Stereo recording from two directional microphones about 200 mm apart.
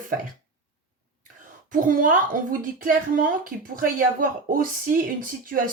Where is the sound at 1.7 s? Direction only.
45° right (ahead or behind).